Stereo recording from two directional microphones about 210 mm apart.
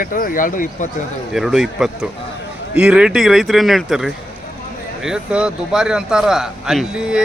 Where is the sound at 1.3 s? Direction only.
Centre (ahead or behind).